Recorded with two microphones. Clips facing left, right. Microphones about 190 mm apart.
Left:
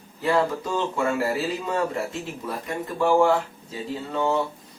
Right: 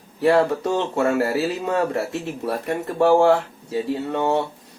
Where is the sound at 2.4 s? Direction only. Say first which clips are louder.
Right 6 dB; 65° right (ahead or behind).